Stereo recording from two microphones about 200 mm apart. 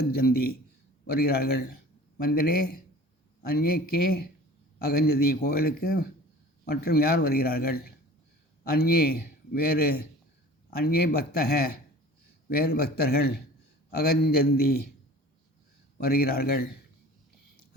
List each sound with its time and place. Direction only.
0.0 s a man's voice: 50° left (ahead or behind)
16.0 s a man's voice: 50° left (ahead or behind)